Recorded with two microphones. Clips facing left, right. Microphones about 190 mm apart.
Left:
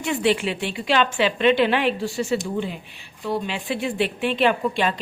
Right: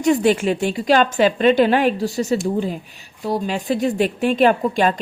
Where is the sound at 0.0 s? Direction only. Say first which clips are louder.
Right 6 dB; 40° right (ahead or behind).